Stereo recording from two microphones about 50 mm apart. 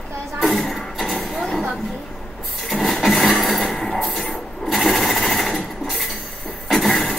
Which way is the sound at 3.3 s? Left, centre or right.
Centre.